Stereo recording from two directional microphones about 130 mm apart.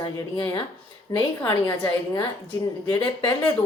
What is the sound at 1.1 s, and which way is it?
A woman's voice, 25° left (ahead or behind).